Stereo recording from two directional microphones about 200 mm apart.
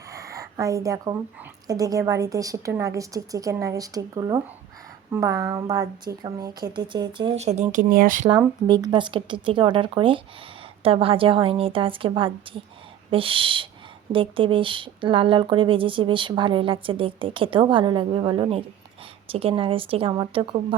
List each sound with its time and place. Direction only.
0.1 s a sound: 15° right (ahead or behind)
1.6 s a woman's voice: 15° right (ahead or behind); by 8.3 s 45° right (ahead or behind)
8.6 s speech: 20° right (ahead or behind)